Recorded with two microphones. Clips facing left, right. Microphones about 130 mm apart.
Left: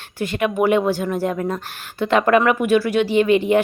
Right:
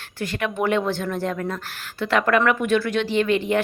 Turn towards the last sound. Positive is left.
turn(degrees=15)  # may be behind; listen again after turning